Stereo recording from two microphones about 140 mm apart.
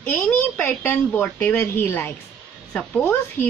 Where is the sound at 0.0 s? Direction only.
10° left (ahead or behind).